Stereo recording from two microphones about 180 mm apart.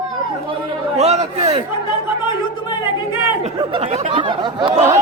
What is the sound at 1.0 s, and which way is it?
Speech, 35° right (ahead or behind).